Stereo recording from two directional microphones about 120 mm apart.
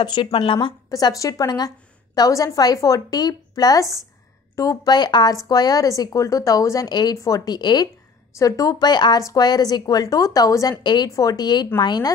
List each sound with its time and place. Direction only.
0.0 s a woman's voice: 40° left (ahead or behind)
0.8 s a woman's voice: 30° left (ahead or behind)